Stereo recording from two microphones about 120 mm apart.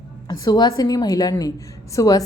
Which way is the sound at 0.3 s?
35° left (ahead or behind).